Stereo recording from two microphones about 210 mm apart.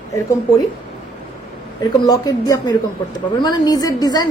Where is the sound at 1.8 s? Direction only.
15° left (ahead or behind).